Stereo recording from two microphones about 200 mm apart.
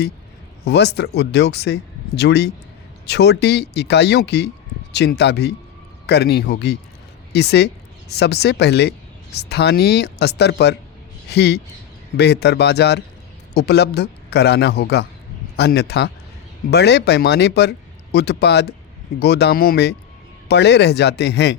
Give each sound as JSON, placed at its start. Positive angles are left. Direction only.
{"t": 0.6, "sound": "speech", "side_deg": 55}